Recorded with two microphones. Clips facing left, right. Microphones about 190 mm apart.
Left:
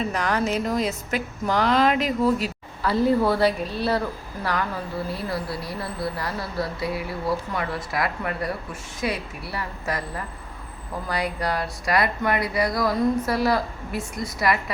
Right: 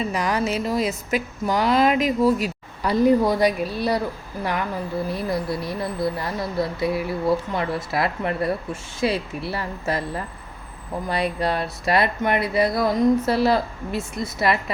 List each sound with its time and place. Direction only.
0.1 s a woman's voice: 10° right (ahead or behind)
5.1 s speech: 20° right (ahead or behind)